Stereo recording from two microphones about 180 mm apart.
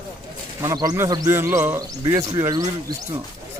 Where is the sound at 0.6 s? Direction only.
20° right (ahead or behind).